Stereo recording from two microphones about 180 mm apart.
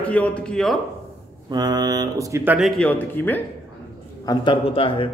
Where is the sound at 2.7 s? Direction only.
5° left (ahead or behind).